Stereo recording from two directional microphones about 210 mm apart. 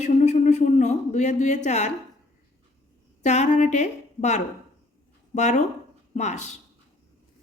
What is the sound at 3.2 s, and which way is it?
A man's voice, 35° left (ahead or behind).